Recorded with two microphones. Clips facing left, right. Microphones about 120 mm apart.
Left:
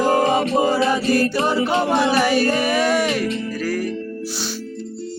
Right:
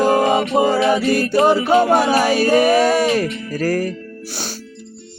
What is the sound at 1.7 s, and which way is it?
Music, 45° right (ahead or behind).